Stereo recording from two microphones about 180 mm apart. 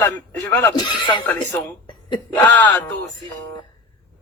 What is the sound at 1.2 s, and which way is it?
Speech, 10° left (ahead or behind).